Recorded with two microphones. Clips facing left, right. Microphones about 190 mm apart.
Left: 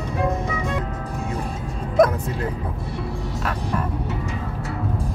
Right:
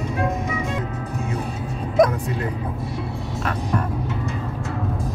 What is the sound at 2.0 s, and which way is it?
Music, centre (ahead or behind).